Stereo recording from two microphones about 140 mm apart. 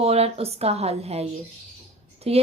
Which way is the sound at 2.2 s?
45° right (ahead or behind).